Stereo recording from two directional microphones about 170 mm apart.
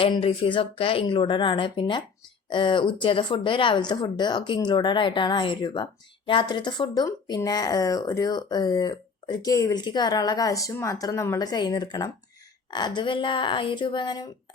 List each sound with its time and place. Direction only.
0.0 s a woman's voice: 35° left (ahead or behind)